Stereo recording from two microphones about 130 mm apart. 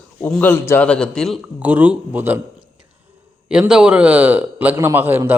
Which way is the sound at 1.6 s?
10° right (ahead or behind).